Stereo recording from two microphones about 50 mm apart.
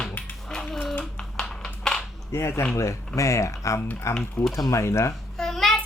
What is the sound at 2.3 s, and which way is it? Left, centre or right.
Speech, left.